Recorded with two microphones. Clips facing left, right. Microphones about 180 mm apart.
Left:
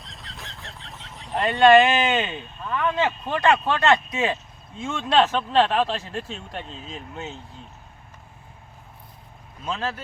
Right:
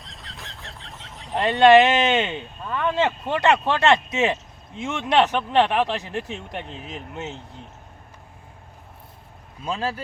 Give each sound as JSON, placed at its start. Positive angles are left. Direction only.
{"t": 0.0, "sound": "chicken", "side_deg": 0}
{"t": 1.4, "sound": "speech", "side_deg": -20}